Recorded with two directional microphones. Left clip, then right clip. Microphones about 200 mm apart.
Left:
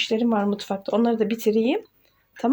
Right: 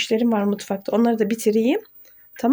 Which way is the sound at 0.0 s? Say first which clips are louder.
Right 2 dB; 30° right (ahead or behind).